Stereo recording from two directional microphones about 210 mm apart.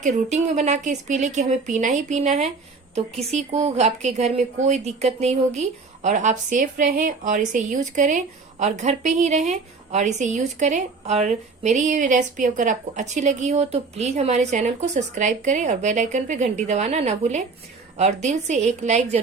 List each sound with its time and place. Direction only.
0.0 s speech: 35° right (ahead or behind)